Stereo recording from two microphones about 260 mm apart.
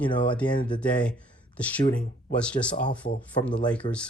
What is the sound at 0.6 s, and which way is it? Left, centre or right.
Speech, centre.